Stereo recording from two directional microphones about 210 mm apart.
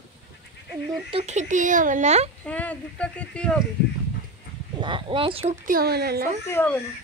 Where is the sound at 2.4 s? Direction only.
5° left (ahead or behind).